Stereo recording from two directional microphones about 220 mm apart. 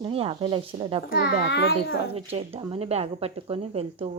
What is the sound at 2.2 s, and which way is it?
Speech, 25° right (ahead or behind).